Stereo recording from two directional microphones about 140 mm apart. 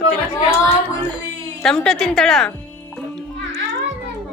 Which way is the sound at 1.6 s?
5° left (ahead or behind).